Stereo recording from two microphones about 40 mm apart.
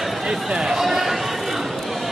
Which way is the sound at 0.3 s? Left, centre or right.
Centre.